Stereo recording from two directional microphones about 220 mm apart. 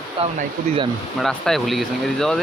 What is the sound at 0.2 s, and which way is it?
Speech, 25° right (ahead or behind).